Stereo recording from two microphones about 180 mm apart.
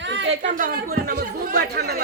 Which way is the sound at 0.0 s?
80° right.